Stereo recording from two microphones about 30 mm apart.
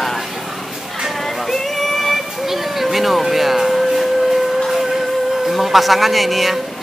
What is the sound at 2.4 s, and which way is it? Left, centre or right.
Music, centre.